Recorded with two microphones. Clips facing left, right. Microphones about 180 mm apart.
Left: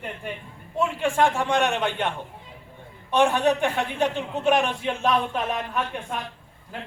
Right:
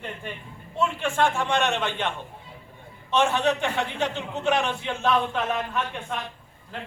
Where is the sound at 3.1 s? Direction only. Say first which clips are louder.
Left 2 dB; 15° left (ahead or behind).